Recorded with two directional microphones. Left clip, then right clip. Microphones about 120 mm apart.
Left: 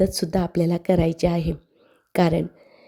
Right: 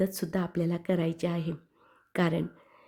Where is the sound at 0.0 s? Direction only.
30° left (ahead or behind).